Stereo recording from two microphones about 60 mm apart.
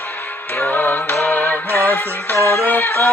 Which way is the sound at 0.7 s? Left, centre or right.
Left.